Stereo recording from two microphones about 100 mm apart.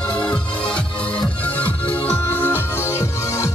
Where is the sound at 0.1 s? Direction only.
10° left (ahead or behind).